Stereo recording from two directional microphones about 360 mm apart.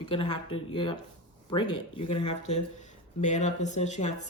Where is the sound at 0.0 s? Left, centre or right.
Centre.